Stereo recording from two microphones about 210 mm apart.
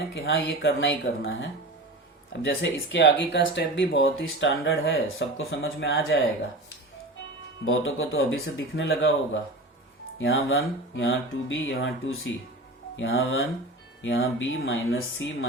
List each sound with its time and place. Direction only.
0.1 s speech: 65° left (ahead or behind)
7.6 s speech: 70° left (ahead or behind)